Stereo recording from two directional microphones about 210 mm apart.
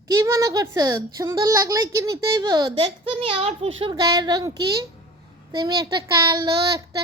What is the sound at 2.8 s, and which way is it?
A child's voice, 30° right (ahead or behind).